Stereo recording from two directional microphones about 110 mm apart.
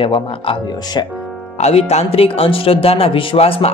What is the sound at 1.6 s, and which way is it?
Speech, 75° left (ahead or behind).